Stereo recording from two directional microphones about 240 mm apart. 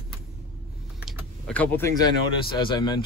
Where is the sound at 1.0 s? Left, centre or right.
Centre.